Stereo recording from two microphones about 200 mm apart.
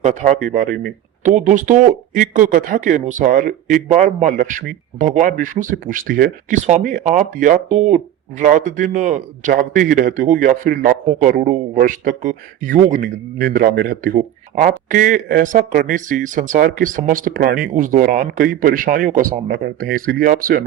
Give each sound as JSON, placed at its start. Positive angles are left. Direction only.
{"t": 0.0, "sound": "speech", "side_deg": -35}